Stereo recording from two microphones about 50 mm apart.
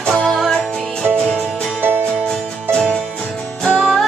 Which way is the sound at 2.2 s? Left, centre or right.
Centre.